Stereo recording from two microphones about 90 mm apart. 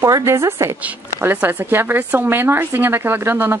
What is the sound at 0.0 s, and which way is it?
Speech, 30° right (ahead or behind).